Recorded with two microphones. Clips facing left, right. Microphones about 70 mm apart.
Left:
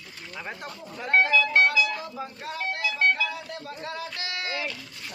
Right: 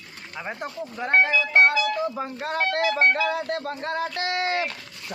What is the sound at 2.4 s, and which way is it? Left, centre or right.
Speech, right.